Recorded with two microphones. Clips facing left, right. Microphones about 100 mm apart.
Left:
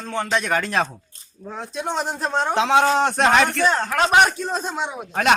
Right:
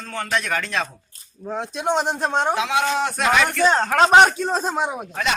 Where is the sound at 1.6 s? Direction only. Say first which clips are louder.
Right 3 dB; 20° right (ahead or behind).